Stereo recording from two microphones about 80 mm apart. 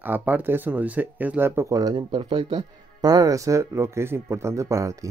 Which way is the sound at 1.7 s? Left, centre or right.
Right.